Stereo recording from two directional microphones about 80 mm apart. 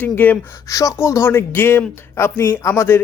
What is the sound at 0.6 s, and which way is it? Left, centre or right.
Speech, left.